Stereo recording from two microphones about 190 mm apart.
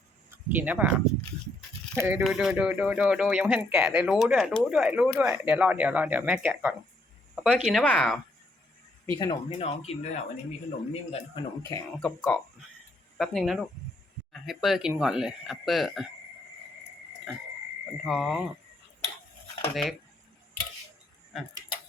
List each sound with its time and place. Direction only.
0.5 s speech: 10° right (ahead or behind)
2.0 s speech: 10° right (ahead or behind)
7.3 s speech: centre (ahead or behind)
9.1 s speech: 25° left (ahead or behind)
12.0 s speech: centre (ahead or behind)
18.0 s speech: centre (ahead or behind)
19.7 s speech: centre (ahead or behind)